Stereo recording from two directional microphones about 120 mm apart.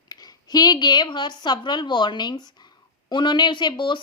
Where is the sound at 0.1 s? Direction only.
35° left (ahead or behind).